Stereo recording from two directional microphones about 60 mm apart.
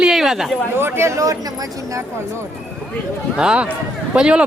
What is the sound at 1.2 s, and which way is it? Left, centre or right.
Speech, right.